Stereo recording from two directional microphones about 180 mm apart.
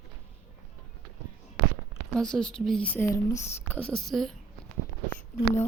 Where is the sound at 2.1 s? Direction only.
5° left (ahead or behind).